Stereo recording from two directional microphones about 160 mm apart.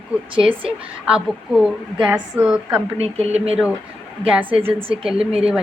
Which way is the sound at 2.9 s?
40° right (ahead or behind).